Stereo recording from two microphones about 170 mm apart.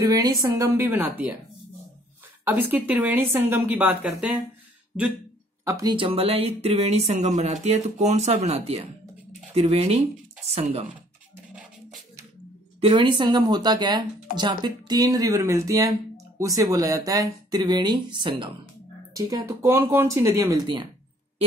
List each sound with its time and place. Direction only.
0.0 s speech: 20° right (ahead or behind)
2.4 s speech: 10° right (ahead or behind)
5.7 s speech: 20° right (ahead or behind)
12.8 s speech: 30° right (ahead or behind)
19.1 s speech: 15° right (ahead or behind)